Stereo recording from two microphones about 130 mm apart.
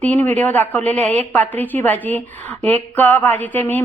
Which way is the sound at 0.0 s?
15° left (ahead or behind).